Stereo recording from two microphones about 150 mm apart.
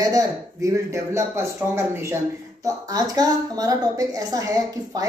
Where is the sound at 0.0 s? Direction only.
25° right (ahead or behind).